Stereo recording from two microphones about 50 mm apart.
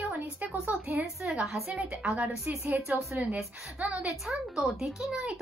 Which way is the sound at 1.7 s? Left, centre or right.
Right.